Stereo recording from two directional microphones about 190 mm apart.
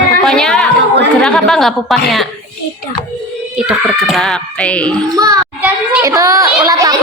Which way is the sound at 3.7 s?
Centre (ahead or behind).